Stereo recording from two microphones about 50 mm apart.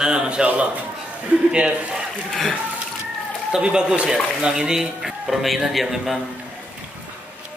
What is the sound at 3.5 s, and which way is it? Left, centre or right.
Speech, centre.